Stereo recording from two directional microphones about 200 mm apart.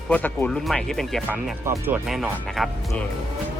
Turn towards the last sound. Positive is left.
turn(degrees=0)  # may be behind; listen again after turning